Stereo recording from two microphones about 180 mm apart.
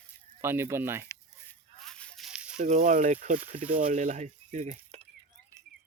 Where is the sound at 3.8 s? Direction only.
45° right (ahead or behind).